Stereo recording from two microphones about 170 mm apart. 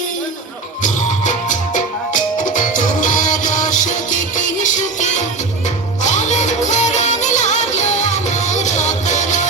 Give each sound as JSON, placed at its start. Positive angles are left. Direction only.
{"t": 0.8, "sound": "music", "side_deg": 45}